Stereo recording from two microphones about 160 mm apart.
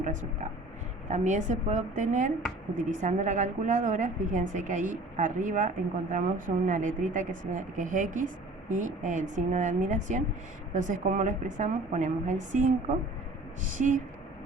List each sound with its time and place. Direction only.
0.0 s a woman's voice: 50° right (ahead or behind)